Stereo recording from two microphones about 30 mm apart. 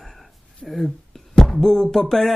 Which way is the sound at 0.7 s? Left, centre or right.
Centre.